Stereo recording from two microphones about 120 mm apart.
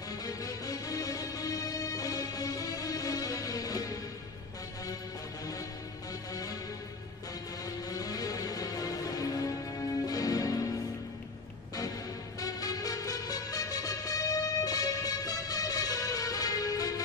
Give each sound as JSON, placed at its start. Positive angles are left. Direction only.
{"t": 0.2, "sound": "music", "side_deg": 30}
{"t": 7.9, "sound": "music", "side_deg": 30}
{"t": 12.4, "sound": "music", "side_deg": 30}